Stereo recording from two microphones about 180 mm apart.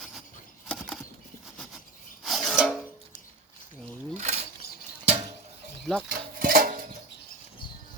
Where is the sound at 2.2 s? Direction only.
Centre (ahead or behind).